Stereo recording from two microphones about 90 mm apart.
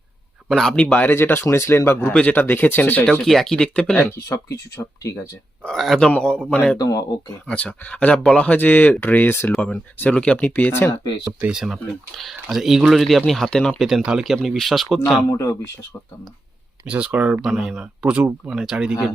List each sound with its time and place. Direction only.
0.4 s speech: 5° left (ahead or behind)
1.1 s speech: 25° left (ahead or behind)
3.1 s speech: 5° left (ahead or behind)
5.6 s speech: centre (ahead or behind)
6.1 s speech: 15° left (ahead or behind)
6.7 s speech: 40° left (ahead or behind)
7.4 s speech: 15° left (ahead or behind)
11.5 s speech: centre (ahead or behind)
15.3 s speech: 30° left (ahead or behind)
16.8 s speech: 15° right (ahead or behind)